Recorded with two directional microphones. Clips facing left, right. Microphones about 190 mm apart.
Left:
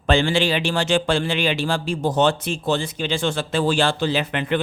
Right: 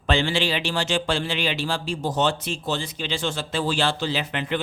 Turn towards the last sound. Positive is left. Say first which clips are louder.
# left 4 dB
turn(degrees=55)  # may be behind; listen again after turning